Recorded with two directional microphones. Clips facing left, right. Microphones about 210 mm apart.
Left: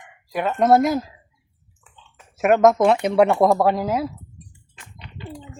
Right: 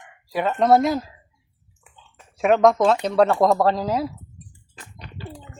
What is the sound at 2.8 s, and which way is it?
Speech, 15° left (ahead or behind).